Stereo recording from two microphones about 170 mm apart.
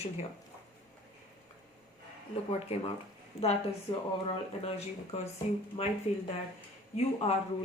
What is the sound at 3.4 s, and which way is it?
Speech, 35° left (ahead or behind).